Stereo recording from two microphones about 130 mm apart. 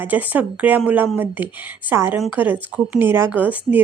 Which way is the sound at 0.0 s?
15° right (ahead or behind).